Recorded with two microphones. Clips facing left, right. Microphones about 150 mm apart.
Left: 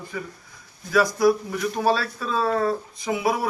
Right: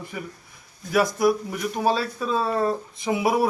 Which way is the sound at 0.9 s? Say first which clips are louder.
Left 1 dB; 25° right (ahead or behind).